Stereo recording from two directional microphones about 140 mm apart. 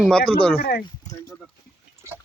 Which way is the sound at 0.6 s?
90° left.